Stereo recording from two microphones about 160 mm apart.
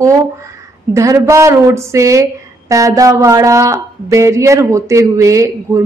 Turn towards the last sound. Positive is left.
turn(degrees=-20)  # may be behind; listen again after turning